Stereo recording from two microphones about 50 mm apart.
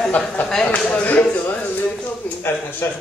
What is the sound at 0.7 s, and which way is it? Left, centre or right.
Speech, left.